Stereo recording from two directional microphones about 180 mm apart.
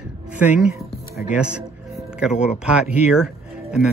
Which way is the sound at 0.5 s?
5° right (ahead or behind).